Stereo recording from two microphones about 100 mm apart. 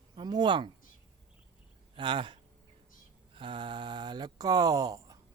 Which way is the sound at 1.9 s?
55° right (ahead or behind).